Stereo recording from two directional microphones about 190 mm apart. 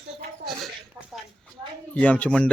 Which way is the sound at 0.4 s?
Centre (ahead or behind).